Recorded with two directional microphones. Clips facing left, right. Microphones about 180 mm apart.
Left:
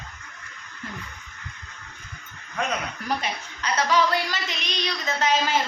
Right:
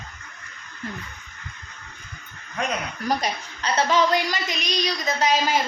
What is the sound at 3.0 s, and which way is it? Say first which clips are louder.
A woman's voice: right 3 dB; 40° right (ahead or behind).